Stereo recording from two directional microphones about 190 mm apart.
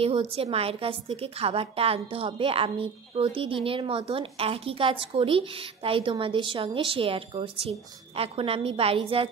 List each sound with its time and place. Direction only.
0.0 s a woman's voice: 30° right (ahead or behind)